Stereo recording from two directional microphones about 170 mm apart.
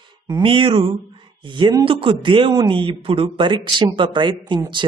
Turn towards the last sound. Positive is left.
turn(degrees=-25)  # may be behind; listen again after turning